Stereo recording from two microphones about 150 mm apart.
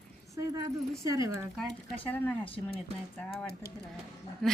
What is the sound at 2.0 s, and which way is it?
Speech, 10° left (ahead or behind).